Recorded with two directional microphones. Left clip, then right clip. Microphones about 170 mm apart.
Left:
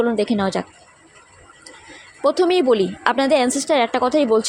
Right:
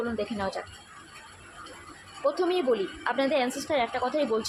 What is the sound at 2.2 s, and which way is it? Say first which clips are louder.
A woman's voice: left 10 dB; 55° left (ahead or behind).